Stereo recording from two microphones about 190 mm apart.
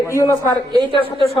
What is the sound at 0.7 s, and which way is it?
Speech, 25° right (ahead or behind).